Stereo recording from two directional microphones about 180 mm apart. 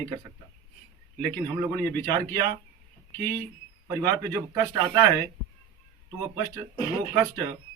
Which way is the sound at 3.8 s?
20° right (ahead or behind).